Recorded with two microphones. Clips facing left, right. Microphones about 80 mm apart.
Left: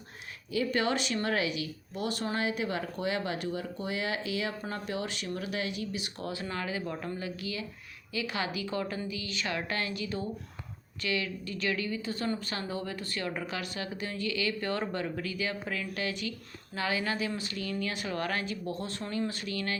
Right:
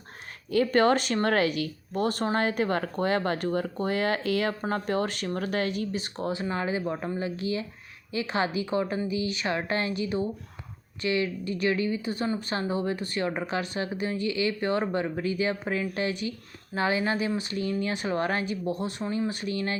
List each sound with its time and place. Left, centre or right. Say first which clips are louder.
0.5 s speech: right 7 dB; right
6.1 s speech: right 7 dB; right